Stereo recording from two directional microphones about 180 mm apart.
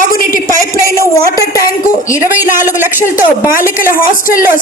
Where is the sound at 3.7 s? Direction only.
50° left (ahead or behind).